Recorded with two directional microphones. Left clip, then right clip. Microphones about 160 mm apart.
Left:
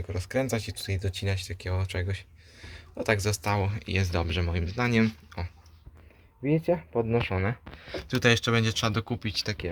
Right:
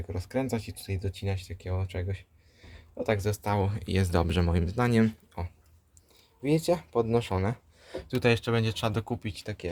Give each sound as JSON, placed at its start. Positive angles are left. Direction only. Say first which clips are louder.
{"t": 0.1, "sound": "speech", "louder": "left 3 dB", "side_deg": -10}